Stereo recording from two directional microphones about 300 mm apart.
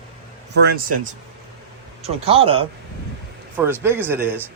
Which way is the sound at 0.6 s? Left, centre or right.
Right.